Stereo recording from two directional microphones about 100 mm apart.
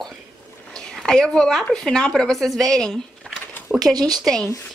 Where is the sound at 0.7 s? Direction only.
5° left (ahead or behind).